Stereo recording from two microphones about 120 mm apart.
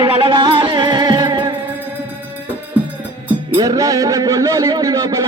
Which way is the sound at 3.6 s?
30° right (ahead or behind).